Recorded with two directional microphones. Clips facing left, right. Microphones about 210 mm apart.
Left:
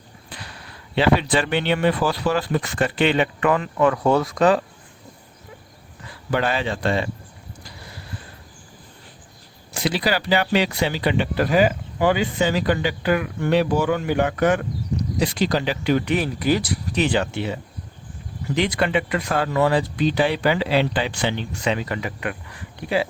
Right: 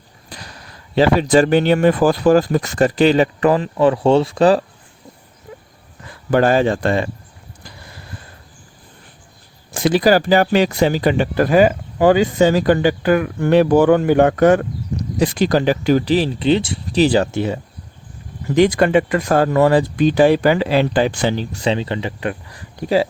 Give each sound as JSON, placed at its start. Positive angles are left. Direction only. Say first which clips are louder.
{"t": 0.3, "sound": "speech", "louder": "right 3 dB", "side_deg": -40}
{"t": 6.3, "sound": "speech", "louder": "right 8 dB", "side_deg": -45}
{"t": 9.7, "sound": "speech", "louder": "right 9 dB", "side_deg": -50}